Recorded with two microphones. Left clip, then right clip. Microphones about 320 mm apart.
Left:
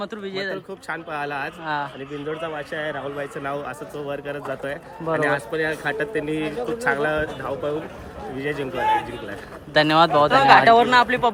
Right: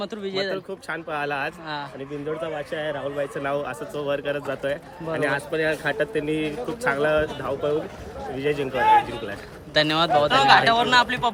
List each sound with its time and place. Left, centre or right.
0.0 s speech: centre
8.7 s a man's voice: right
9.7 s speech: centre